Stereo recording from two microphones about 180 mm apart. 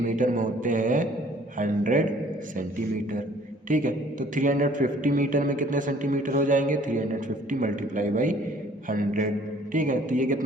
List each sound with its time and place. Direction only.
0.0 s mantra: 45° right (ahead or behind)
3.7 s mantra: 45° right (ahead or behind)